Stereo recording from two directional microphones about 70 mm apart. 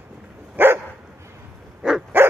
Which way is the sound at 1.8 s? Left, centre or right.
Centre.